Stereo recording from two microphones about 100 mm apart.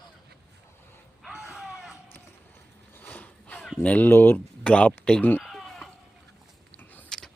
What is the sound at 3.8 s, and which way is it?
Speech, 15° left (ahead or behind).